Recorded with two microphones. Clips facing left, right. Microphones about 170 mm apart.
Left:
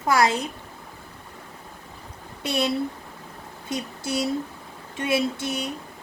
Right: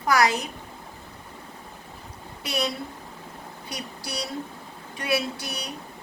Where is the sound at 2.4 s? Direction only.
25° left (ahead or behind).